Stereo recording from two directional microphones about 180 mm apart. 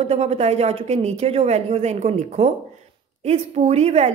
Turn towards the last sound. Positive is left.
turn(degrees=-35)  # may be behind; listen again after turning